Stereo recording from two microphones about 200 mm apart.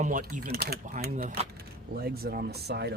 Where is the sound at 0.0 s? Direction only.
40° right (ahead or behind).